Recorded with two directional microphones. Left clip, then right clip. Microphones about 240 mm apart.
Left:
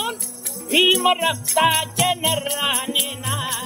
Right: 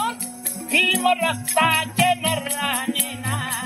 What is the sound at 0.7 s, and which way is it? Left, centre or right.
Music, centre.